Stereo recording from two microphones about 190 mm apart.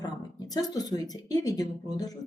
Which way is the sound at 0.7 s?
20° left (ahead or behind).